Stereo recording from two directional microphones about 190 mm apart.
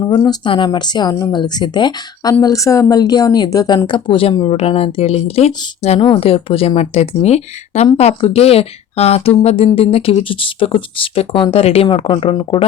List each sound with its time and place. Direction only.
0.0 s a woman's voice: 20° left (ahead or behind)